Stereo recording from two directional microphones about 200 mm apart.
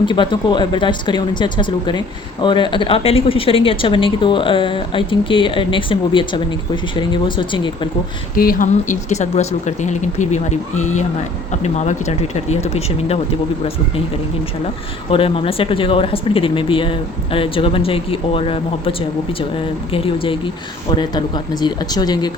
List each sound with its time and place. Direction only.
0.0 s speech: 25° left (ahead or behind)
8.4 s speech: 45° left (ahead or behind)
15.1 s speech: 30° left (ahead or behind)